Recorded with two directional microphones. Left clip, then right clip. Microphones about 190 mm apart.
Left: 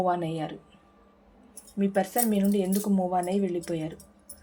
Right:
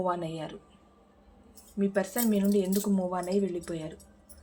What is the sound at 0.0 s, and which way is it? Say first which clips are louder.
Speech: left 4 dB; 35° left (ahead or behind).